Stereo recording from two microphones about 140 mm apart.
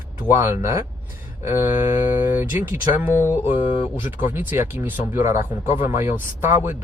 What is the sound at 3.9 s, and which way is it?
Speech, 15° right (ahead or behind).